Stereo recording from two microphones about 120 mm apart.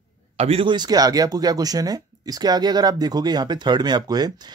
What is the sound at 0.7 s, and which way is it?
Speech, 35° right (ahead or behind).